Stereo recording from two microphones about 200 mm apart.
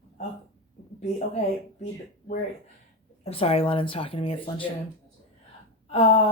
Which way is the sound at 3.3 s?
30° left (ahead or behind).